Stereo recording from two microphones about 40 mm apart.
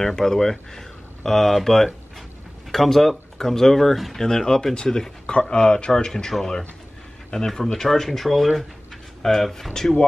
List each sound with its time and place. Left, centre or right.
0.0 s speech: centre
7.4 s speech: centre